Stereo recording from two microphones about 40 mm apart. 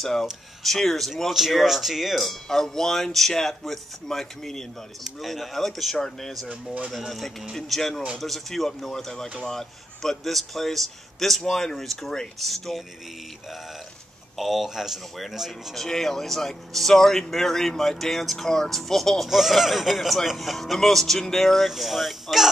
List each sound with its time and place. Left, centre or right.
0.0 s a man's voice: centre
6.5 s speech: right
6.9 s a man's voice: centre
14.3 s a man's voice: centre
15.7 s speech: centre
19.2 s a man's voice: centre